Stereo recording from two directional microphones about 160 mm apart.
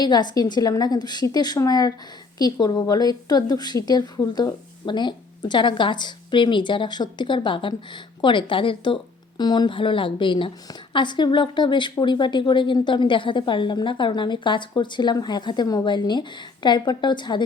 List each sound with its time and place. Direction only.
0.0 s a woman's voice: 25° left (ahead or behind)